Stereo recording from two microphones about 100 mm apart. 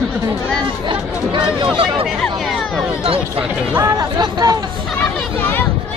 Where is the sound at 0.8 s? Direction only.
55° right (ahead or behind).